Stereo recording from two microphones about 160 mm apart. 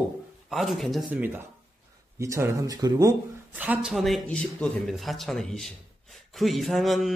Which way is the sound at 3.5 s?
5° right (ahead or behind).